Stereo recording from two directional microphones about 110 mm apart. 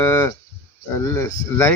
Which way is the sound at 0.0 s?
20° left (ahead or behind).